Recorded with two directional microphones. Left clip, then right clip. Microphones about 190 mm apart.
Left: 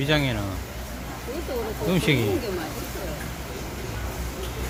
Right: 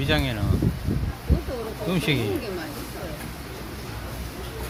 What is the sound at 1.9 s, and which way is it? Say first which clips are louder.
Speech: left 2 dB; 5° right (ahead or behind).